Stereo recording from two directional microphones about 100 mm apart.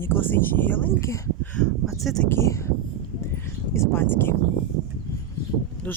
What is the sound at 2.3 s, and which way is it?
Speech, 30° left (ahead or behind).